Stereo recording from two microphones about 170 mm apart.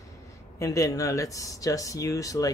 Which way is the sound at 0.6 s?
20° left (ahead or behind).